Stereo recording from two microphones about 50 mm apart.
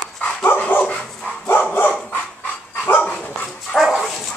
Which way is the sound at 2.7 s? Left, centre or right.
Left.